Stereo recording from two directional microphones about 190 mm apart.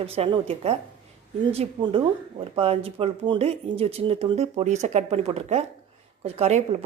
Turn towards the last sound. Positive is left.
turn(degrees=-35)  # may be behind; listen again after turning